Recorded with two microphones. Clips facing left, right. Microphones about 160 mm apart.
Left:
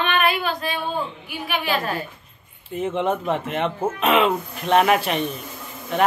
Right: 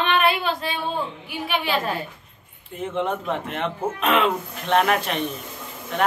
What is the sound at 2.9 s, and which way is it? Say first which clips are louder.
Speech: left 1 dB; 5° left (ahead or behind).